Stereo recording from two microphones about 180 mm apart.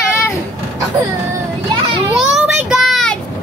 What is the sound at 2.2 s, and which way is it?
Child singing, centre (ahead or behind).